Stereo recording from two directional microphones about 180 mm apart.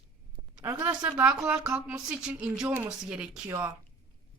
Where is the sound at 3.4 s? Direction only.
15° right (ahead or behind).